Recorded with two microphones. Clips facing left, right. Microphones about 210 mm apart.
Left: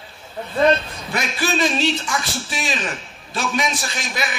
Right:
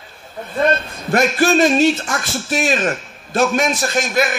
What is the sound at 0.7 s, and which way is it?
A man's voice, 50° right (ahead or behind).